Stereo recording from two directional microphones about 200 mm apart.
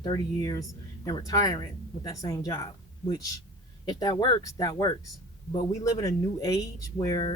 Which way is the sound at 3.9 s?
20° left (ahead or behind).